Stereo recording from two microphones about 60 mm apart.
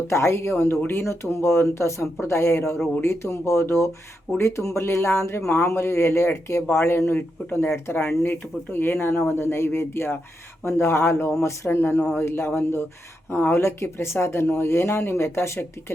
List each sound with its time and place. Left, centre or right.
0.1 s speech: left
6.7 s speech: left
13.6 s speech: left